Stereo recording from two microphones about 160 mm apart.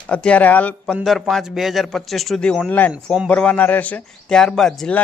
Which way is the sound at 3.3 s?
10° left (ahead or behind).